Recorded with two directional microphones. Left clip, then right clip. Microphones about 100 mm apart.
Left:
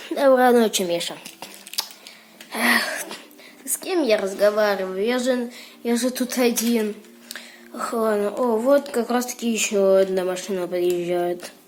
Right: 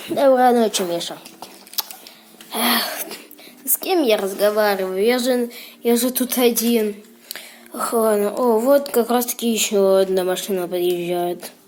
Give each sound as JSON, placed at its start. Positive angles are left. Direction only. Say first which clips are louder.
{"t": 0.1, "sound": "a woman's voice", "louder": "right 2 dB", "side_deg": 20}
{"t": 0.3, "sound": "speech", "louder": "right 1 dB", "side_deg": 35}
{"t": 0.9, "sound": "speech", "louder": "even", "side_deg": 20}
{"t": 2.5, "sound": "a sound", "louder": "even", "side_deg": 0}
{"t": 3.9, "sound": "speech", "louder": "right 2 dB", "side_deg": -25}
{"t": 5.4, "sound": "speech", "louder": "right 6 dB", "side_deg": -20}
{"t": 7.3, "sound": "whispering", "louder": "right 3 dB", "side_deg": -25}
{"t": 7.8, "sound": "speech", "louder": "right 4 dB", "side_deg": -30}